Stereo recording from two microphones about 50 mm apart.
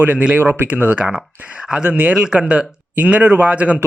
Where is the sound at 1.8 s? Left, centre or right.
Right.